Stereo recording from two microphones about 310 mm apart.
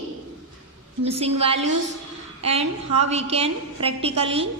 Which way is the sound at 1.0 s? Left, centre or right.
Centre.